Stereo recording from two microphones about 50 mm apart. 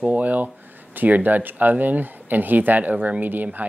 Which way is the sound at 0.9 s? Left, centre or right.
Right.